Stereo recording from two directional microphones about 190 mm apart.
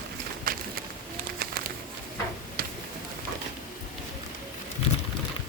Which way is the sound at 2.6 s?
50° right (ahead or behind).